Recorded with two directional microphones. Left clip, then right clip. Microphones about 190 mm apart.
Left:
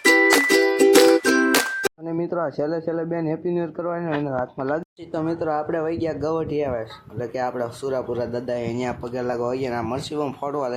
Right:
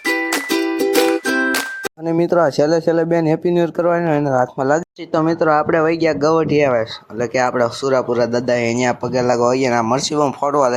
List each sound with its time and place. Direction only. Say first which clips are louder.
0.0 s music: left 4 dB; 5° left (ahead or behind)
2.6 s speech: right 10 dB; 45° right (ahead or behind)
3.6 s speech: right 10 dB; 75° right (ahead or behind)
4.2 s speech: right 9 dB; 45° right (ahead or behind)
5.1 s speech: right 9 dB; 25° right (ahead or behind)